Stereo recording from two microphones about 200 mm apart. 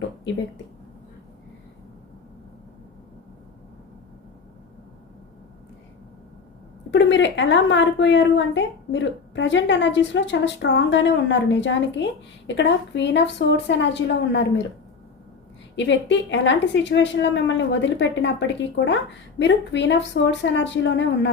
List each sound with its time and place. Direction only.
6.9 s a woman's voice: 65° left (ahead or behind)
15.7 s a woman's voice: 65° left (ahead or behind)